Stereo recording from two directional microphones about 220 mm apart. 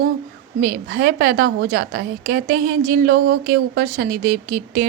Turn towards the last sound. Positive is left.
turn(degrees=-40)  # may be behind; listen again after turning